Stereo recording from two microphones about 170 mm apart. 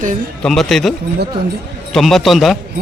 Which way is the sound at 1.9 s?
Centre (ahead or behind).